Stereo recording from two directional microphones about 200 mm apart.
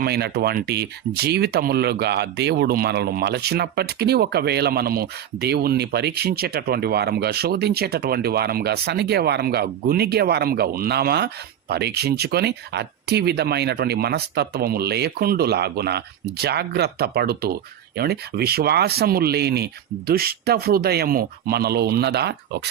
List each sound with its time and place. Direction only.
0.0 s speech: 55° right (ahead or behind)